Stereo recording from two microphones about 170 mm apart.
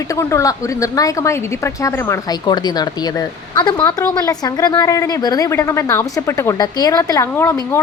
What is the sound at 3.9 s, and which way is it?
A woman's voice, 20° left (ahead or behind).